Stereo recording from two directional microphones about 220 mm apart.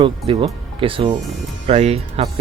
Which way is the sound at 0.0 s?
20° right (ahead or behind).